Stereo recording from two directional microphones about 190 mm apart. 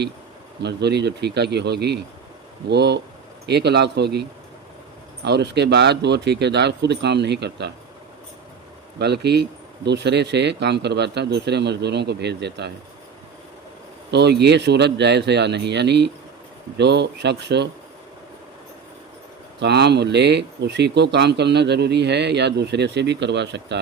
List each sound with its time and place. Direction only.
0.6 s speech: 60° right (ahead or behind)
9.0 s speech: 60° right (ahead or behind)
14.1 s speech: 60° right (ahead or behind)
19.5 s speech: 60° right (ahead or behind)